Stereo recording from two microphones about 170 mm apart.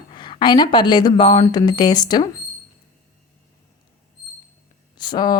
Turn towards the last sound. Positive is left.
turn(degrees=25)  # may be behind; listen again after turning